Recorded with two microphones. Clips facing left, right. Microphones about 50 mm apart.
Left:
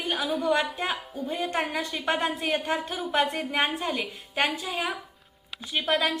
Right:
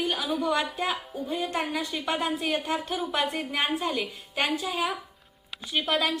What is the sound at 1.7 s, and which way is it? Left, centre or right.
Music, left.